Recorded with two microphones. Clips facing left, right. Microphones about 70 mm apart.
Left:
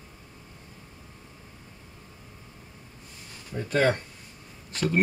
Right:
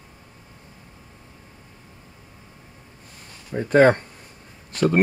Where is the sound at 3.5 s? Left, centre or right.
Right.